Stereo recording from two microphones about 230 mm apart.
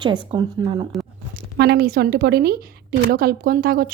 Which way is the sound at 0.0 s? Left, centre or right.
Centre.